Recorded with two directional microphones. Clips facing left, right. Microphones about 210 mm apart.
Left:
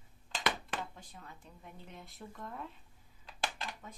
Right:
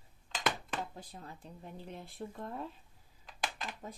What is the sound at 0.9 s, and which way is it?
Speech, 35° right (ahead or behind).